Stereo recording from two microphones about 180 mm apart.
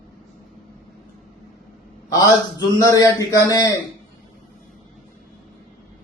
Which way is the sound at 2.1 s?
20° left (ahead or behind).